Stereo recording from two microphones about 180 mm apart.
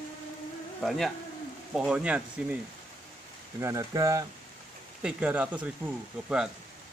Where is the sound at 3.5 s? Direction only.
15° right (ahead or behind).